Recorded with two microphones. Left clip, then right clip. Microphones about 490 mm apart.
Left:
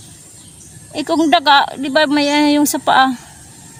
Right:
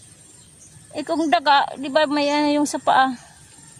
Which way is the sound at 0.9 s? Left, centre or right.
Right.